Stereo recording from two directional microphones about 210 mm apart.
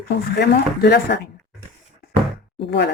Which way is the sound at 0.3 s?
55° left (ahead or behind).